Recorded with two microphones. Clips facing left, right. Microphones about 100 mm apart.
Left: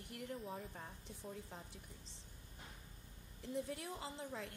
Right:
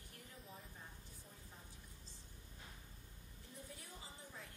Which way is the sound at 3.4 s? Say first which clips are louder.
Left 14 dB; 70° left (ahead or behind).